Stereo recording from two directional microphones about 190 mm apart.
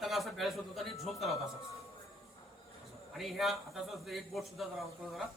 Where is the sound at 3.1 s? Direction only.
Centre (ahead or behind).